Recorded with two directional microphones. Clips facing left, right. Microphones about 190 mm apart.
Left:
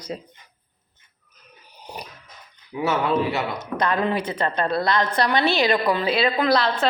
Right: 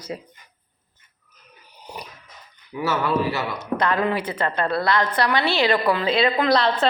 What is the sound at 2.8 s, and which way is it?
A man's voice, 20° left (ahead or behind).